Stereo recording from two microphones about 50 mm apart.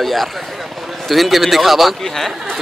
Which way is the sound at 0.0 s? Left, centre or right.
Centre.